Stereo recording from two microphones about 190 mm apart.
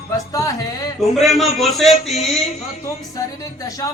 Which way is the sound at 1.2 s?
Centre (ahead or behind).